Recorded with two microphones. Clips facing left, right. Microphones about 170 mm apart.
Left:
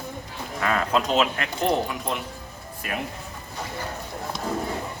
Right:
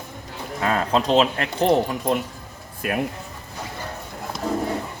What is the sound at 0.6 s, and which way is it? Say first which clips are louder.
Speech: right 3 dB; 30° right (ahead or behind).